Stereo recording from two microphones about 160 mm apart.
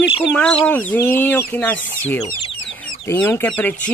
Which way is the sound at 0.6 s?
10° left (ahead or behind).